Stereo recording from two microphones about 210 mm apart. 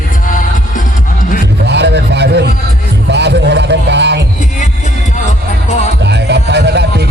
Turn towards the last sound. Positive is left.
turn(degrees=-55)  # may be behind; listen again after turning